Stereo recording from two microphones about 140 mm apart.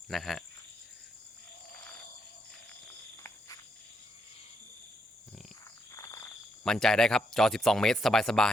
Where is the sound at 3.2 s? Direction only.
25° left (ahead or behind).